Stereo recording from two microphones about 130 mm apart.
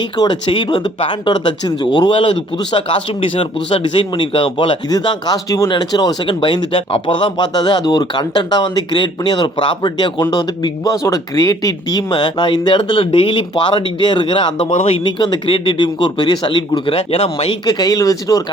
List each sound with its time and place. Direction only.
0.2 s speech: 35° left (ahead or behind)
16.9 s speech: 55° left (ahead or behind)
17.7 s speech: 30° left (ahead or behind)